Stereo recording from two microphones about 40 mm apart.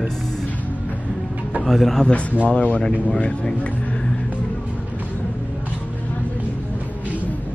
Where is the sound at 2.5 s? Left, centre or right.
Left.